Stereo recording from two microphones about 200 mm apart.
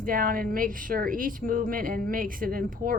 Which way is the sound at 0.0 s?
45° right (ahead or behind).